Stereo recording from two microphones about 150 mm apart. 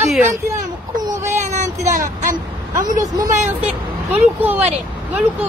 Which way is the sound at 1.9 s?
60° right (ahead or behind).